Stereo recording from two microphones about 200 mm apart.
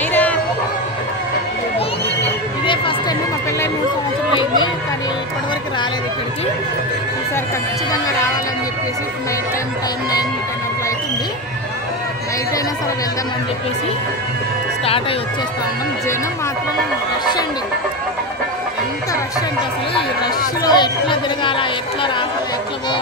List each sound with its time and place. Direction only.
0.1 s a sound: 10° left (ahead or behind)
2.6 s music: 25° left (ahead or behind)
20.6 s chatter: 20° left (ahead or behind)